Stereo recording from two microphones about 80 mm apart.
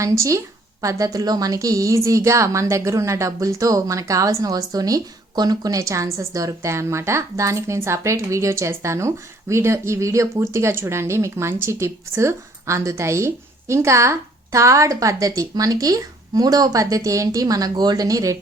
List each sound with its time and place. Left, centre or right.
0.0 s a woman's voice: right